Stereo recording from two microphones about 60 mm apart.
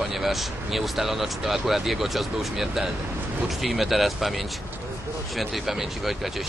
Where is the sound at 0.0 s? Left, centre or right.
Centre.